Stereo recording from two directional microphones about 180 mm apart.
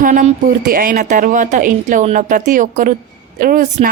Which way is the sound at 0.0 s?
45° right (ahead or behind).